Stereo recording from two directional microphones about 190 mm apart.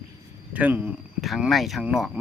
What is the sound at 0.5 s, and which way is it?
Speech, 10° right (ahead or behind).